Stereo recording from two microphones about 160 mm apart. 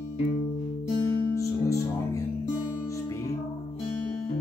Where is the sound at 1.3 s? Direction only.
20° left (ahead or behind).